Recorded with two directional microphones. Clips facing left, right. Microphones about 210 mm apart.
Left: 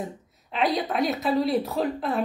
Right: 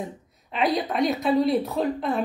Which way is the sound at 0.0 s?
Centre (ahead or behind).